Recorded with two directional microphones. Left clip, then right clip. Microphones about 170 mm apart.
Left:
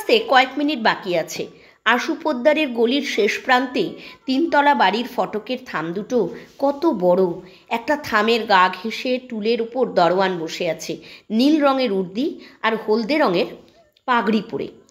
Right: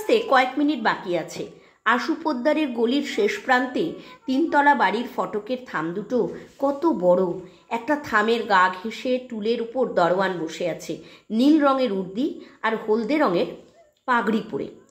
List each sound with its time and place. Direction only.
0.0 s a woman's voice: 35° left (ahead or behind)